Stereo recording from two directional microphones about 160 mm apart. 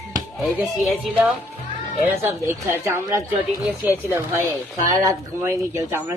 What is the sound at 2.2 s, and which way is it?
Speech, 15° right (ahead or behind).